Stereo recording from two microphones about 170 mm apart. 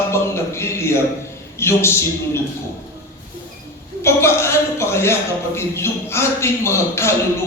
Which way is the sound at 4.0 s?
15° left (ahead or behind).